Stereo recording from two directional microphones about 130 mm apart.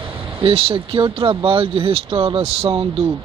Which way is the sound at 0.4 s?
45° right (ahead or behind).